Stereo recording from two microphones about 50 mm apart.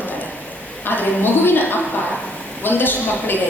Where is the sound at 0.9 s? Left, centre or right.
Left.